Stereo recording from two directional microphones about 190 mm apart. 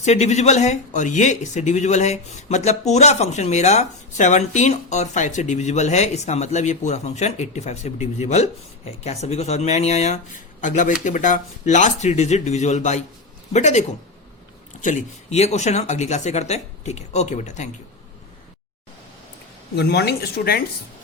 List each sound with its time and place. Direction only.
0.0 s speech: 35° left (ahead or behind)
14.8 s speech: 40° left (ahead or behind)
19.7 s speech: 60° left (ahead or behind)